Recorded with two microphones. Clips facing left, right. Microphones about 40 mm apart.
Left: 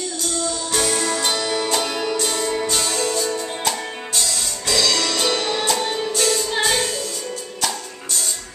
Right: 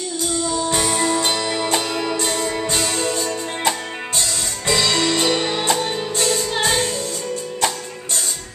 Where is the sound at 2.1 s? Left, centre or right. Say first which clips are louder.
Even; right.